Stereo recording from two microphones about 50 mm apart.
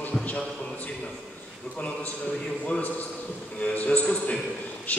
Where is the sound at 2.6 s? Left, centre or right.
Left.